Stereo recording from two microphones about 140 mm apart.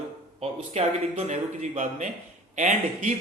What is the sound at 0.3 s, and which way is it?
Speech, 50° right (ahead or behind).